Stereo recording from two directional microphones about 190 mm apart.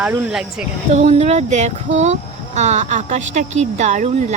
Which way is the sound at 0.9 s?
35° right (ahead or behind).